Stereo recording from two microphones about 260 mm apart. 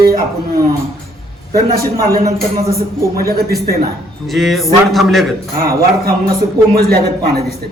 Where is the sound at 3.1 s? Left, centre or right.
Right.